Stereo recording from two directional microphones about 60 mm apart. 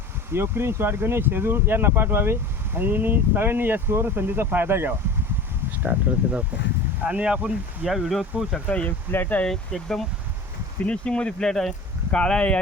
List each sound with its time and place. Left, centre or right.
0.3 s speech: right; by 7.9 s centre
7.9 s speech: centre
8.6 s speech: left
9.1 s speech: left
9.4 s speech: centre
10.8 s speech: centre